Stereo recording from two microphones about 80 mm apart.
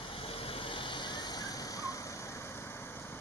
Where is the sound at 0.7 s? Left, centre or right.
Left.